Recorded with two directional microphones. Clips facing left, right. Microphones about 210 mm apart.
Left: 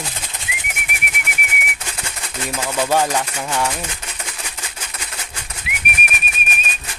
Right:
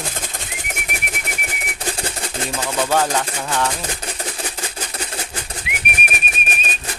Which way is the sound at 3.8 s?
35° right (ahead or behind).